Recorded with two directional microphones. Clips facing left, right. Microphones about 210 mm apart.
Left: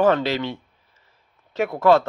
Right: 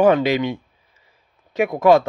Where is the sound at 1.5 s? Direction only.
15° right (ahead or behind).